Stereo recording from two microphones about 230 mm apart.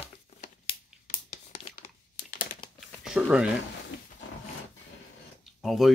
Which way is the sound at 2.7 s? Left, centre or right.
Centre.